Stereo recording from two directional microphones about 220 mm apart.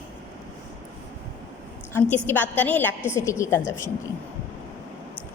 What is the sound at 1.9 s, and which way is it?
A woman's voice, 10° left (ahead or behind).